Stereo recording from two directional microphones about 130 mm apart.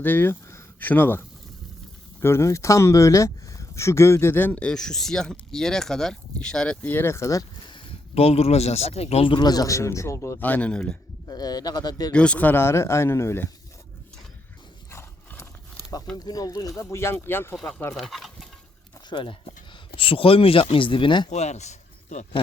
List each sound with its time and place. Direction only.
0.0 s speech: 15° left (ahead or behind)
2.2 s speech: 20° left (ahead or behind)
11.3 s speech: 30° left (ahead or behind)
12.1 s speech: 10° left (ahead or behind)
14.8 s horse: 20° left (ahead or behind)
16.1 s speech: 30° left (ahead or behind); by 17.9 s 10° left (ahead or behind)
17.9 s speech: centre (ahead or behind)
19.1 s speech: 40° left (ahead or behind)
21.2 s a man's voice: 60° left (ahead or behind)